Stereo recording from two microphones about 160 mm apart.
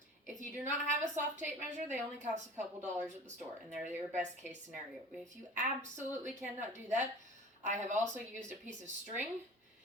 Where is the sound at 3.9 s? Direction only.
50° right (ahead or behind).